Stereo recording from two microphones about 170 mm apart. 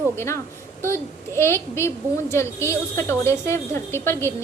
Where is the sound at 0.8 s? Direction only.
15° left (ahead or behind).